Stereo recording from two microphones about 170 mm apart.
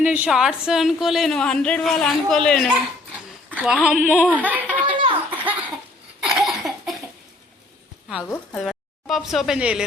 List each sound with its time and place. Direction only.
0.0 s a woman's voice: 10° right (ahead or behind)
4.9 s laughter: 30° right (ahead or behind)
5.4 s a sound: 10° right (ahead or behind)
8.5 s speech: centre (ahead or behind)